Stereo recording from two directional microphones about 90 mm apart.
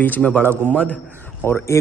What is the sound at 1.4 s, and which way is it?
Speech, 25° left (ahead or behind).